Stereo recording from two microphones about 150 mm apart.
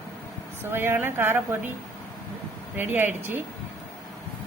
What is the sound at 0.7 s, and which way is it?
Speech, 15° right (ahead or behind).